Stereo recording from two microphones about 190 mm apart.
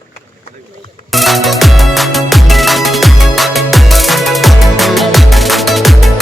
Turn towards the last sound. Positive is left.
turn(degrees=0)  # may be behind; listen again after turning